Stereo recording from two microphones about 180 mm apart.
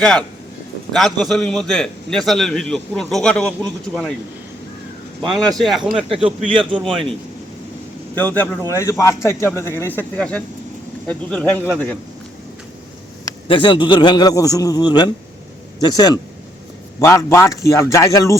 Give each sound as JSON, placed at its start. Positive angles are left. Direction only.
{"t": 0.0, "sound": "a man's voice", "side_deg": 5}
{"t": 5.3, "sound": "a man's voice", "side_deg": 0}
{"t": 6.2, "sound": "speech", "side_deg": -30}
{"t": 8.4, "sound": "speech", "side_deg": 10}
{"t": 13.5, "sound": "a man's voice", "side_deg": 30}